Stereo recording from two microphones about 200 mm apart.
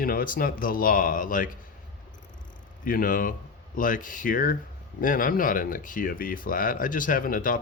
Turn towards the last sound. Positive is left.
turn(degrees=45)  # may be behind; listen again after turning